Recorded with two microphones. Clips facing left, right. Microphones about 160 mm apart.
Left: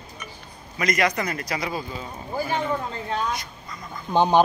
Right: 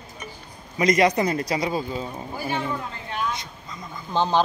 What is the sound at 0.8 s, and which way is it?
A man's voice, 30° right (ahead or behind).